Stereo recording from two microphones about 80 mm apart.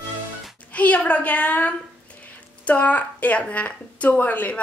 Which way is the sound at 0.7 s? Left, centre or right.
Centre.